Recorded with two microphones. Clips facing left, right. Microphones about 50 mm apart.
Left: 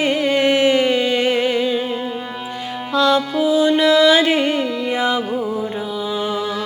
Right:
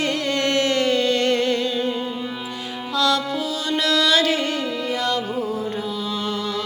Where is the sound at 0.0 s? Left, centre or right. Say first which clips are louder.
Left 6 dB; centre.